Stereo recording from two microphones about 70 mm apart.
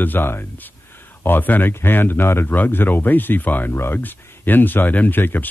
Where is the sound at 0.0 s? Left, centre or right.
Left.